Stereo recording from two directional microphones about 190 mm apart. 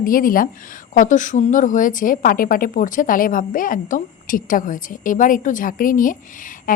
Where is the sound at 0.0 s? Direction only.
50° left (ahead or behind).